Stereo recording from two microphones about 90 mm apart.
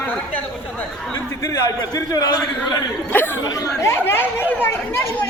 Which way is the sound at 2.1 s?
45° left (ahead or behind).